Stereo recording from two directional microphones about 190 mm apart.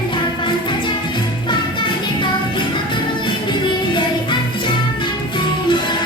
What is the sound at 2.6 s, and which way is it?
Music, 25° left (ahead or behind).